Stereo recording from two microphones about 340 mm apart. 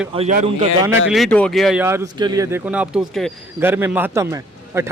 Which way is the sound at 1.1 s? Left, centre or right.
Centre.